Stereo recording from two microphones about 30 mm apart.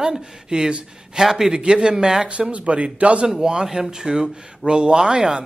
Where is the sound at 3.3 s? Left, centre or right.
Right.